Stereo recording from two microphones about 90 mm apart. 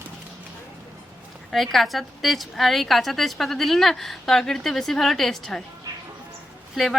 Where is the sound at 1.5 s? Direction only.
Centre (ahead or behind).